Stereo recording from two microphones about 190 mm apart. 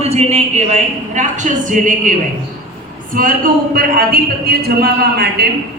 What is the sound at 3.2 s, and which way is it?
A man's voice, 50° right (ahead or behind).